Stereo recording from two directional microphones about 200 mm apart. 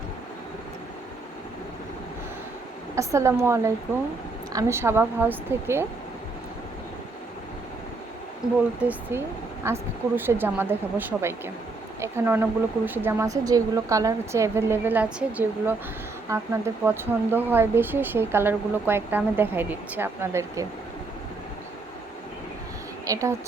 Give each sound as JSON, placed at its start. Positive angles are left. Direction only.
{"t": 2.9, "sound": "speech", "side_deg": -15}
{"t": 8.8, "sound": "speech", "side_deg": -10}
{"t": 23.0, "sound": "a woman's voice", "side_deg": -15}